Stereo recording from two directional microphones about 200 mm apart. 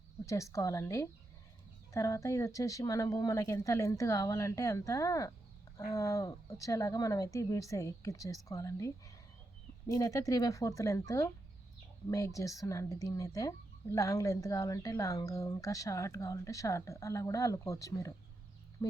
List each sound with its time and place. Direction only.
0.3 s speech: 15° left (ahead or behind)